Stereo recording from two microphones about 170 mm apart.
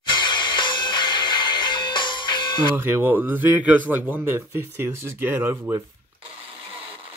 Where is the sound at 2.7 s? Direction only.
15° right (ahead or behind).